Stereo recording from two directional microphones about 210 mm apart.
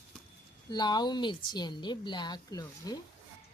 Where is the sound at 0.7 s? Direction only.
20° left (ahead or behind).